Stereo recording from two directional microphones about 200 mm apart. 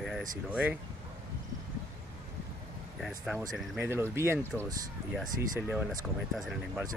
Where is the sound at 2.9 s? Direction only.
Centre (ahead or behind).